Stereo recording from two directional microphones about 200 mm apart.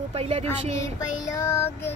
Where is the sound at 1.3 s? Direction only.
15° left (ahead or behind).